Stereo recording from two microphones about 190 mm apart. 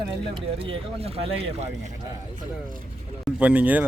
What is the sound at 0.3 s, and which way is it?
Speech, 30° right (ahead or behind).